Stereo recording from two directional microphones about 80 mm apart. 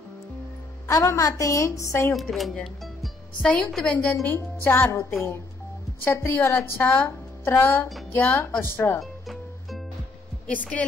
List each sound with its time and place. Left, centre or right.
0.8 s a woman's voice: left
2.1 s a woman's voice: centre
2.5 s music: centre
3.4 s a woman's voice: centre
4.6 s a woman's voice: left
9.0 s music: centre
10.4 s a woman's voice: centre